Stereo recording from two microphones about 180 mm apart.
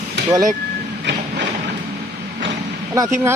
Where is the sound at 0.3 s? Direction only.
20° right (ahead or behind).